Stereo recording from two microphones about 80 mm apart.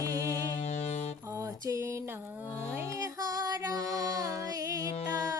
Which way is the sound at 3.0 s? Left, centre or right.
Right.